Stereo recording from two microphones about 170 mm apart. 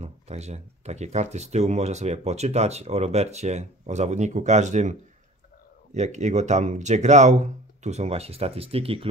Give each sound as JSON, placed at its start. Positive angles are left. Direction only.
{"t": 0.0, "sound": "speech", "side_deg": -40}
{"t": 5.9, "sound": "speech", "side_deg": -45}